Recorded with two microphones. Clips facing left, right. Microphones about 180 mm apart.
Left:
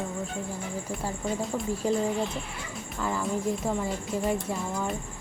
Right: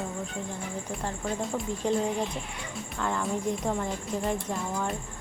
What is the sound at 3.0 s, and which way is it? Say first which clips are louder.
Speech: left 1 dB; 5° left (ahead or behind).